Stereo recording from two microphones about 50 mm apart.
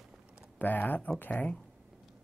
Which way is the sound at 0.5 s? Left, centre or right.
Left.